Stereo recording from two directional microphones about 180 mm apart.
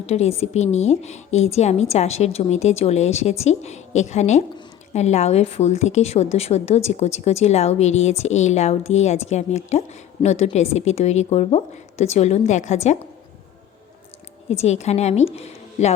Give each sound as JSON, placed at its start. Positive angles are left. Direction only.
{"t": 0.0, "sound": "a woman's voice", "side_deg": 35}
{"t": 14.5, "sound": "a woman's voice", "side_deg": 35}